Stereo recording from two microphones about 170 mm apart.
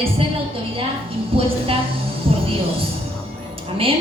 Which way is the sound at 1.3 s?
35° right (ahead or behind).